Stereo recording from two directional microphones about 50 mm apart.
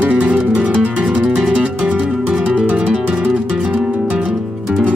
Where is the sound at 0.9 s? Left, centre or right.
Centre.